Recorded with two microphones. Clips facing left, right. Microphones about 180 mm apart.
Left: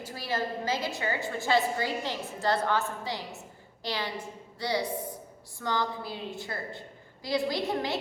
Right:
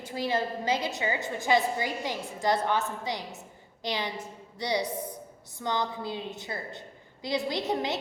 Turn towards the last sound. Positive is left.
turn(degrees=-20)  # may be behind; listen again after turning